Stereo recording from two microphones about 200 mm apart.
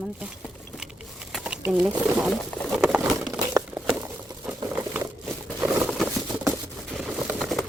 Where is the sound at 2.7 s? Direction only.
Centre (ahead or behind).